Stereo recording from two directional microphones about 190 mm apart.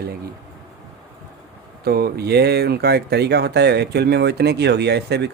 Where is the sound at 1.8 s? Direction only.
55° right (ahead or behind).